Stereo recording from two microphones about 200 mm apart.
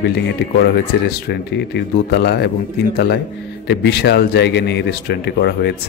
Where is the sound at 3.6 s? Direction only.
55° left (ahead or behind).